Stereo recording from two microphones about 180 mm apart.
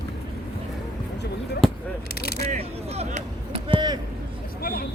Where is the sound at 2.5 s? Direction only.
35° right (ahead or behind).